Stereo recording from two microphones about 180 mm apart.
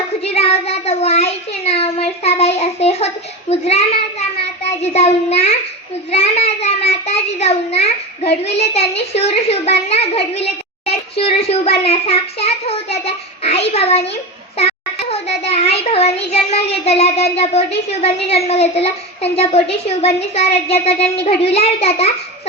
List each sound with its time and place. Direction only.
0.2 s a sound: 35° left (ahead or behind)
3.5 s a child's voice: 35° left (ahead or behind)
6.1 s child singing: 35° left (ahead or behind)
8.2 s a child's voice: 60° left (ahead or behind)
8.5 s a child's voice: 35° left (ahead or behind)
14.1 s a sound: 35° left (ahead or behind)
15.1 s child singing: 35° left (ahead or behind)
16.8 s a child's voice: 35° left (ahead or behind)